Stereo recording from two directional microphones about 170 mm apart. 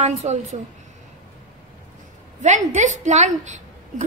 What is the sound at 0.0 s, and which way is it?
Speech, 45° right (ahead or behind).